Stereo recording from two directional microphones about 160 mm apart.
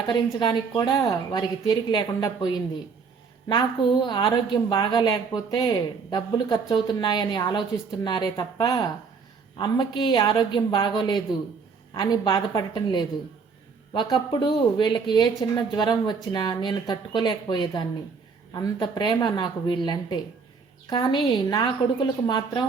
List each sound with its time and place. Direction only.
0.1 s a woman's voice: 25° left (ahead or behind)